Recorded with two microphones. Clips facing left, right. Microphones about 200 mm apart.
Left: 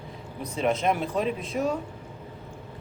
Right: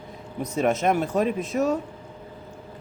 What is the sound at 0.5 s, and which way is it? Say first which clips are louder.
Speech: right 3 dB; 50° right (ahead or behind).